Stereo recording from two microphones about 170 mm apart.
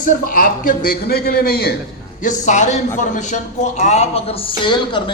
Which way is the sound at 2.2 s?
45° left (ahead or behind).